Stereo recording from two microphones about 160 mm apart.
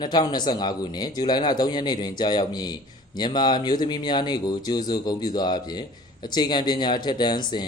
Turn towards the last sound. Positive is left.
turn(degrees=25)  # may be behind; listen again after turning